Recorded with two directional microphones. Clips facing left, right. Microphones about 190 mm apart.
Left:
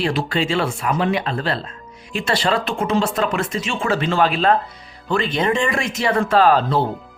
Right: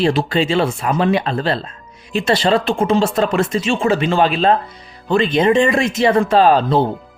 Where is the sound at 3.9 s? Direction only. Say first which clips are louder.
Right 2 dB; 15° right (ahead or behind).